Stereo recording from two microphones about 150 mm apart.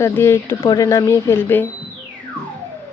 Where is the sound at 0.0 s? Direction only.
20° left (ahead or behind).